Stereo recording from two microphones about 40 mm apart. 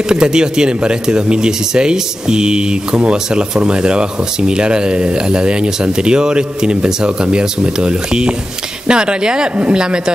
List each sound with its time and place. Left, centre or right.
0.1 s speech: centre